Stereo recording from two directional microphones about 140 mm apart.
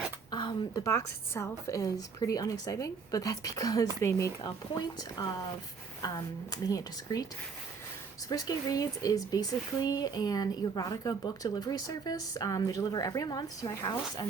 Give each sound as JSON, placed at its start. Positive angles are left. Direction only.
{"t": 0.3, "sound": "speech", "side_deg": 30}
{"t": 8.3, "sound": "speech", "side_deg": 25}